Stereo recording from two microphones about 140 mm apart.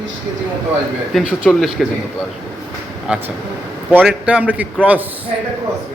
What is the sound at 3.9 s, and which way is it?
A man's voice, 10° right (ahead or behind).